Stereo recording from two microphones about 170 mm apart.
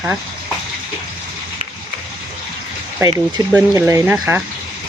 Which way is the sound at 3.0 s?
20° right (ahead or behind).